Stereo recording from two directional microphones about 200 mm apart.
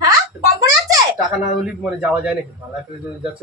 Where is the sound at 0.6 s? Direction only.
15° right (ahead or behind).